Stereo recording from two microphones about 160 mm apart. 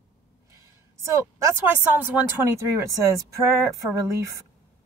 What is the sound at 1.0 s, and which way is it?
A woman's voice, 20° right (ahead or behind).